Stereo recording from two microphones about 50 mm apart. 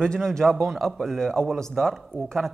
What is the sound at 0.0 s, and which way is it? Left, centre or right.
A man's voice, centre.